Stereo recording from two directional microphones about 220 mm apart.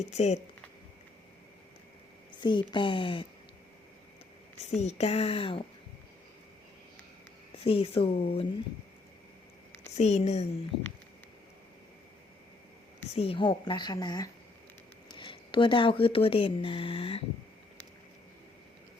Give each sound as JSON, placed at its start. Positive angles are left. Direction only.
{"t": 0.0, "sound": "speech", "side_deg": 30}
{"t": 2.4, "sound": "a woman's voice", "side_deg": 20}
{"t": 4.8, "sound": "a woman's voice", "side_deg": 30}
{"t": 7.6, "sound": "a woman's voice", "side_deg": 25}
{"t": 9.9, "sound": "speech", "side_deg": 30}
{"t": 13.1, "sound": "a woman's voice", "side_deg": 25}